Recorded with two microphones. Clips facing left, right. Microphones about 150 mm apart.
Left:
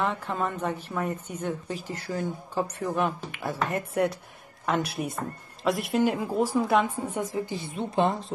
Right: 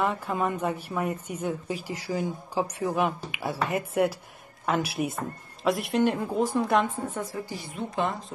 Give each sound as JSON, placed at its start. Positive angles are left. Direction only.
{"t": 0.0, "sound": "a woman's voice", "side_deg": -10}
{"t": 7.1, "sound": "a woman's voice", "side_deg": 15}